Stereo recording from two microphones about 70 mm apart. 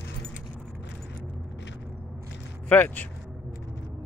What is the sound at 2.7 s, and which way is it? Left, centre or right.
Speech, left.